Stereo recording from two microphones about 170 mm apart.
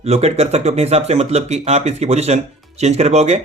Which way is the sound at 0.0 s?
40° right (ahead or behind).